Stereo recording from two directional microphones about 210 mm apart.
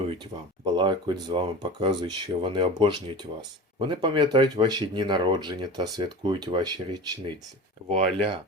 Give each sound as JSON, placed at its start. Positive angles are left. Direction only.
{"t": 0.6, "sound": "speech", "side_deg": -20}